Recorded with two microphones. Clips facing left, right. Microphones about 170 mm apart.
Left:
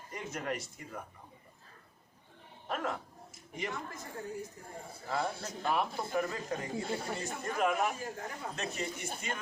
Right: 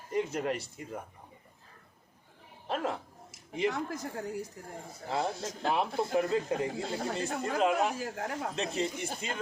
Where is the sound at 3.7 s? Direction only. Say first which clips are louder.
Right 7 dB; 85° right.